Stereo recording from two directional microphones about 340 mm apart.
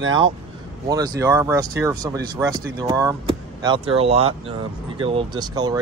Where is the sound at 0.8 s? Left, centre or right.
Centre.